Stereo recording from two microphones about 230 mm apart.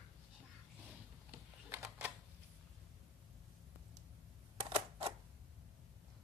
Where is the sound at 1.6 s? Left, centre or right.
Centre.